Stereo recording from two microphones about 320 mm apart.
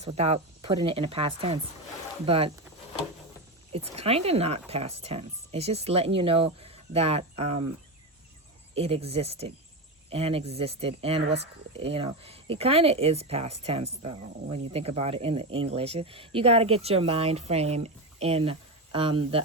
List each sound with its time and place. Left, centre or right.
0.0 s speech: centre
3.7 s speech: centre
8.7 s speech: centre